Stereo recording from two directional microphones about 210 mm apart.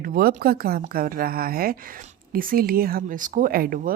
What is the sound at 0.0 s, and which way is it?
A woman's voice, 45° right (ahead or behind).